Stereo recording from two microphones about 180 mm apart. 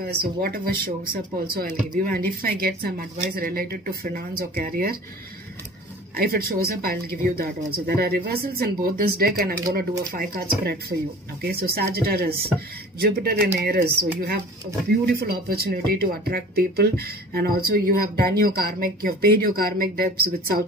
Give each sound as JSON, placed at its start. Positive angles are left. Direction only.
{"t": 0.0, "sound": "speech", "side_deg": -55}
{"t": 6.1, "sound": "speech", "side_deg": -55}